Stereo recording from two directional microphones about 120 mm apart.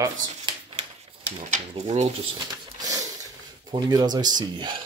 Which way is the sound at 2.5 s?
30° right (ahead or behind).